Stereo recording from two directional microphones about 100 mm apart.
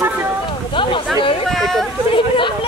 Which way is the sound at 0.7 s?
60° left (ahead or behind).